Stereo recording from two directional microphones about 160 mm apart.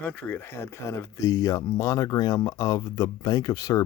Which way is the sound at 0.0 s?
10° left (ahead or behind).